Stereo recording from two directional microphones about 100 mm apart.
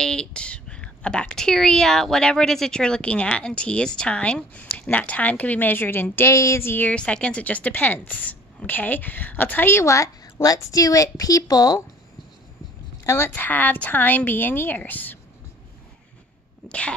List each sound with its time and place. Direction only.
0.0 s speech: 10° left (ahead or behind); by 11.8 s 40° left (ahead or behind)
13.0 s a woman's voice: 25° left (ahead or behind)
16.6 s speech: 10° left (ahead or behind)